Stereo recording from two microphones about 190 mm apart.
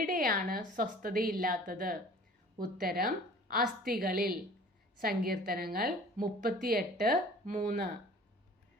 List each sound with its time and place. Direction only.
0.0 s a woman's voice: 45° right (ahead or behind)